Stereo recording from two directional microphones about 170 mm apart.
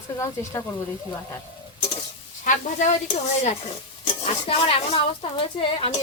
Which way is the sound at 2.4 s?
45° left (ahead or behind).